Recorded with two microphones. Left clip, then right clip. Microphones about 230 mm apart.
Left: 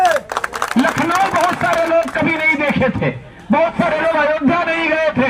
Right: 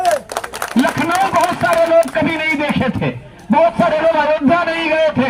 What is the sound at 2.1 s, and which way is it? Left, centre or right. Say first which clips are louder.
A man's voice: left 1 dB; right.